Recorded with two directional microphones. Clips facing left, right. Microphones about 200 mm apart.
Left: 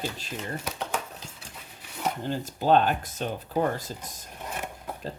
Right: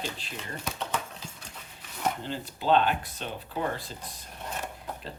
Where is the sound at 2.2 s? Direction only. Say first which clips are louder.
Left 6 dB; 45° left (ahead or behind).